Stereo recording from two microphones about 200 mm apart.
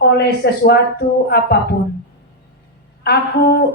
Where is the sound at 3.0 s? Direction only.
50° left (ahead or behind).